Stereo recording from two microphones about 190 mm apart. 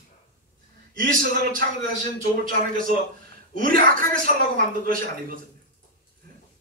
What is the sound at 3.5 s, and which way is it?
A man's voice, 50° right (ahead or behind).